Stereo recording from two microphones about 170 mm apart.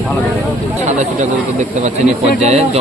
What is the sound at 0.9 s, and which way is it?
A man's voice, 45° right (ahead or behind).